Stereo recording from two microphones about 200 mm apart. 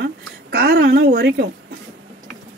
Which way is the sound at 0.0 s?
55° right (ahead or behind).